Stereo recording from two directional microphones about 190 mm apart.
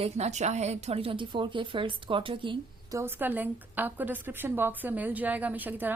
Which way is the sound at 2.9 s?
10° right (ahead or behind).